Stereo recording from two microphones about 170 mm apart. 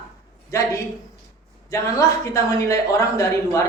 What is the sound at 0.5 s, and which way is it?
Speech, 20° left (ahead or behind).